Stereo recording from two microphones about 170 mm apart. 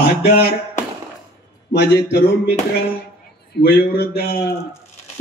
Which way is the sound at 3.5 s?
70° left (ahead or behind).